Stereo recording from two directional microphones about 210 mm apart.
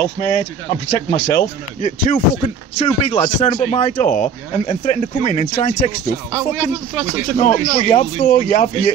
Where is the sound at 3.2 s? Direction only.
30° left (ahead or behind).